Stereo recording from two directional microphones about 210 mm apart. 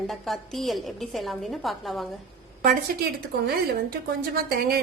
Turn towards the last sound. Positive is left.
turn(degrees=-50)  # may be behind; listen again after turning